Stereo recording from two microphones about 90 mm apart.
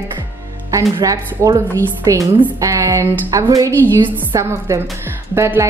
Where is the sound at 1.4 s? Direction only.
35° right (ahead or behind).